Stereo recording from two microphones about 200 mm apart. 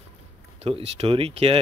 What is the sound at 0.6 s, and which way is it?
Speech, 30° right (ahead or behind).